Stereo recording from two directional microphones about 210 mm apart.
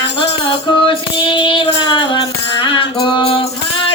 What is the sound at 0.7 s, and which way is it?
Music, 25° left (ahead or behind).